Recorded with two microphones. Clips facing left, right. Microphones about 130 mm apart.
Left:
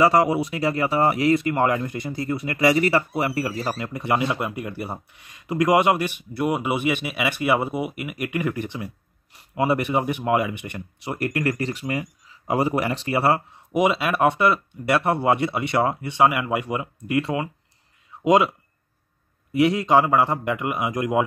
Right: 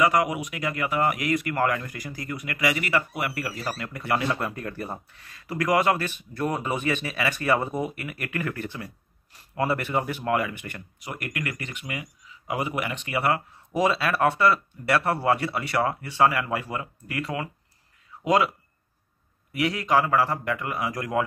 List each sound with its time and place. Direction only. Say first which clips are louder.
0.0 s speech: left 5 dB; 30° left (ahead or behind)
13.7 s speech: left 3 dB; 15° left (ahead or behind)
19.5 s speech: left 5 dB; 25° left (ahead or behind)